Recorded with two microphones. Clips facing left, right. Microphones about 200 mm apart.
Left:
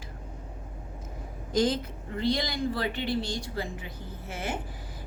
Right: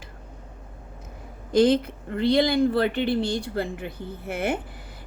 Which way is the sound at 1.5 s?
60° right (ahead or behind).